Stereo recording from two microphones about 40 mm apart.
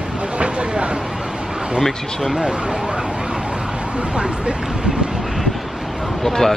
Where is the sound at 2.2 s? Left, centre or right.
Centre.